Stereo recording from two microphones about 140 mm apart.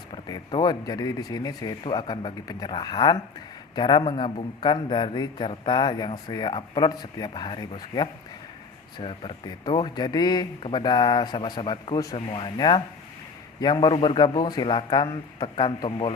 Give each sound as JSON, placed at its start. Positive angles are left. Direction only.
{"t": 0.1, "sound": "a man's voice", "side_deg": 35}